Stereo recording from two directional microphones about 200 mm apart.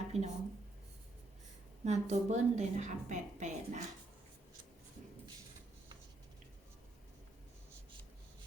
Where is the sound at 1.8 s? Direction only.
35° right (ahead or behind).